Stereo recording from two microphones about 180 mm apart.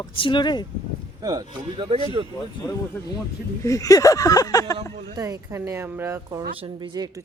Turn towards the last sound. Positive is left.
turn(degrees=-20)  # may be behind; listen again after turning